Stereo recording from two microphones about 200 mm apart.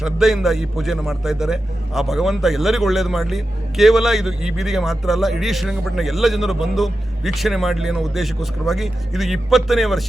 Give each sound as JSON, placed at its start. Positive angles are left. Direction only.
{"t": 0.0, "sound": "a man's voice", "side_deg": 0}